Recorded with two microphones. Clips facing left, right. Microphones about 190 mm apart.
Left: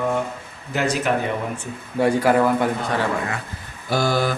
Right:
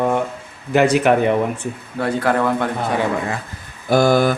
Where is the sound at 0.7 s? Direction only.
60° right (ahead or behind).